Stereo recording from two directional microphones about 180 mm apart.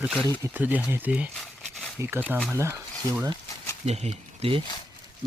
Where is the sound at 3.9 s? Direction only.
35° right (ahead or behind).